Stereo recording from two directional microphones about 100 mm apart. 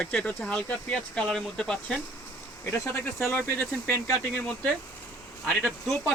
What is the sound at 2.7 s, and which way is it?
Speech, 30° left (ahead or behind).